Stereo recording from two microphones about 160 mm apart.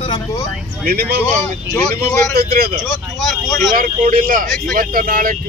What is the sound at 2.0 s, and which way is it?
Speech, 70° right (ahead or behind).